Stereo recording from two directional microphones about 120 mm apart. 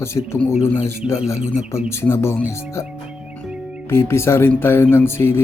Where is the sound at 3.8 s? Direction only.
20° left (ahead or behind).